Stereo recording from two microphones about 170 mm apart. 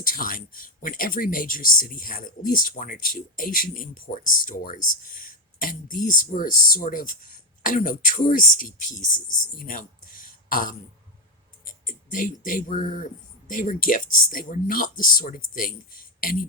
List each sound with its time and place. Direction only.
0.0 s speech: 55° left (ahead or behind)